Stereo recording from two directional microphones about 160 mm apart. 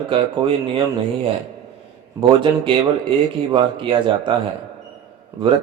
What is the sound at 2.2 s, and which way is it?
Speech, 15° right (ahead or behind).